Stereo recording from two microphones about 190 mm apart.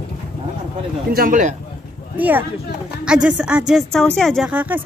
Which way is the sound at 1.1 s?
50° right (ahead or behind).